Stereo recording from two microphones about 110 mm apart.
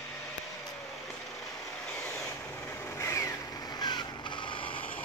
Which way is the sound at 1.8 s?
10° left (ahead or behind).